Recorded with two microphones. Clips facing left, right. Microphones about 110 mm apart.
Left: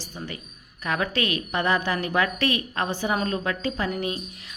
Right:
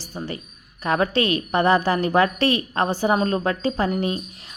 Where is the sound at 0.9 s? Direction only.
35° right (ahead or behind).